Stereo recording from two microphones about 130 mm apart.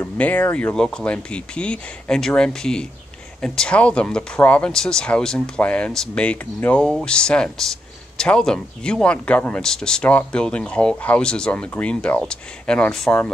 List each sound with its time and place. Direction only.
0.0 s speech: 10° left (ahead or behind)